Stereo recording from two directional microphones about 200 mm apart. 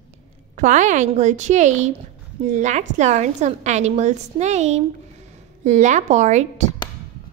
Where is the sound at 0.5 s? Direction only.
35° right (ahead or behind).